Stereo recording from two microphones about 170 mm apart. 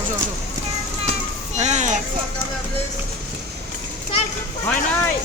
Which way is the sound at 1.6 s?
45° right (ahead or behind).